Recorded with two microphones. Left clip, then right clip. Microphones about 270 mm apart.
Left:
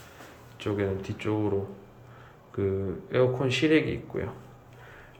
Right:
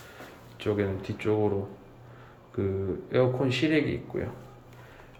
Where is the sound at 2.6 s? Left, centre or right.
Centre.